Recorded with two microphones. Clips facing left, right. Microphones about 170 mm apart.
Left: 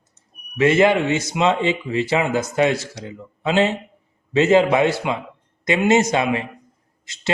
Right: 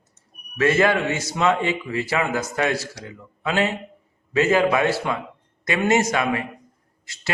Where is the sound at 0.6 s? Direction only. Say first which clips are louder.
Left 3 dB; 20° left (ahead or behind).